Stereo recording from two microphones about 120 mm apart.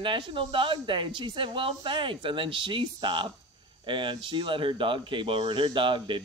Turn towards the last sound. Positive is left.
turn(degrees=-45)  # may be behind; listen again after turning